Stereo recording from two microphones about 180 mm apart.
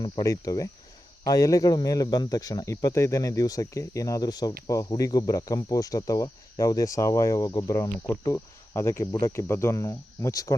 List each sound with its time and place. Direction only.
0.0 s speech: 20° left (ahead or behind)